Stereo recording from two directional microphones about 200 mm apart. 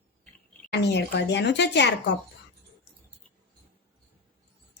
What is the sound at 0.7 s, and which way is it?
A woman's voice, 60° left (ahead or behind).